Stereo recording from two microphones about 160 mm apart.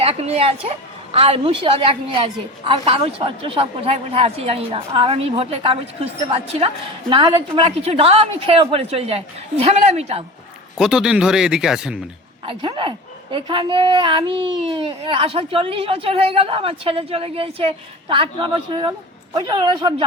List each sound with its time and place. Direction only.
0.0 s a child's voice: 40° right (ahead or behind)
10.8 s speech: 5° right (ahead or behind)
12.5 s a child's voice: 30° right (ahead or behind)